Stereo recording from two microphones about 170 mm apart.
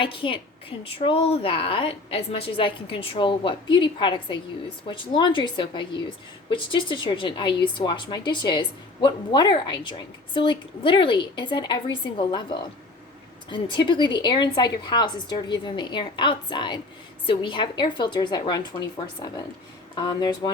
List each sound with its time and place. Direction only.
0.0 s a woman's voice: 30° left (ahead or behind)